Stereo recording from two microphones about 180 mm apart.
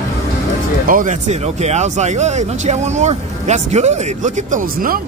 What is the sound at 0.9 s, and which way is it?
Speech, 45° right (ahead or behind).